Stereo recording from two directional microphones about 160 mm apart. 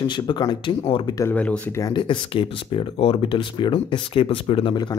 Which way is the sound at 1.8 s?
30° left (ahead or behind).